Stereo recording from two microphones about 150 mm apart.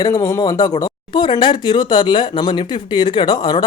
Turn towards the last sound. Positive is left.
turn(degrees=30)  # may be behind; listen again after turning